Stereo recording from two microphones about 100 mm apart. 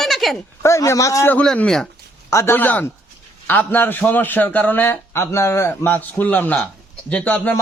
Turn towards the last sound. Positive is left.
turn(degrees=15)  # may be behind; listen again after turning